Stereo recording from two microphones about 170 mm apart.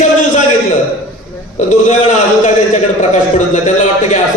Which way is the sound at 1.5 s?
45° left (ahead or behind).